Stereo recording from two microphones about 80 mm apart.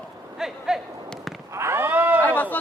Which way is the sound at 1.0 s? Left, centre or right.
Centre.